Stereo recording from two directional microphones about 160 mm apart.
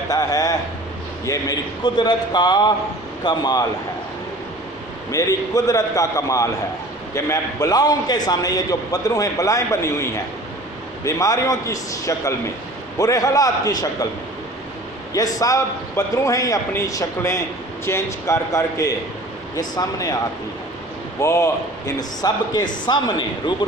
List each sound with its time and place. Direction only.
0.1 s a man's voice: 20° left (ahead or behind)
5.1 s a man's voice: 20° left (ahead or behind)
11.1 s a man's voice: 20° left (ahead or behind)
15.1 s a man's voice: 20° left (ahead or behind)
21.2 s a man's voice: 20° left (ahead or behind)